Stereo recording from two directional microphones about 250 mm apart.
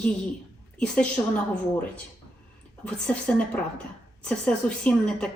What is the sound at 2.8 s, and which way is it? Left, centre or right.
A woman's voice, centre.